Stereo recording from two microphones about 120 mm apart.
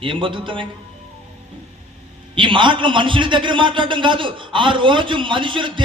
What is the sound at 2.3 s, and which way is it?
A man's voice, 45° right (ahead or behind).